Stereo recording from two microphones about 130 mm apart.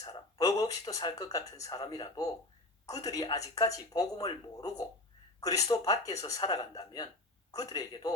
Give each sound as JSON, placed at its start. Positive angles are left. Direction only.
{"t": 0.0, "sound": "speech", "side_deg": 25}